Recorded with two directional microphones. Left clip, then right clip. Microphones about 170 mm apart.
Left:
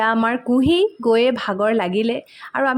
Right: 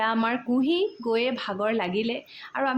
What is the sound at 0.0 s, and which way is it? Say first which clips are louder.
Speech: left 7 dB; 35° left (ahead or behind).